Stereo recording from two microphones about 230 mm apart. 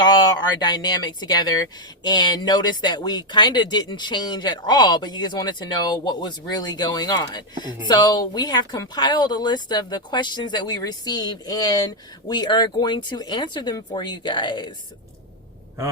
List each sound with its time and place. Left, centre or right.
0.0 s speech: centre